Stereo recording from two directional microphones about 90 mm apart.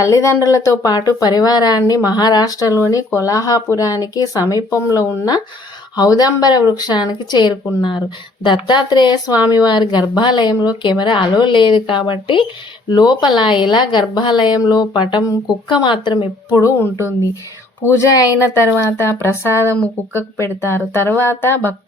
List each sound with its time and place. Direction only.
0.0 s speech: 35° left (ahead or behind); by 12.5 s 65° left (ahead or behind)
12.9 s speech: 50° left (ahead or behind)
16.6 s speech: 30° left (ahead or behind)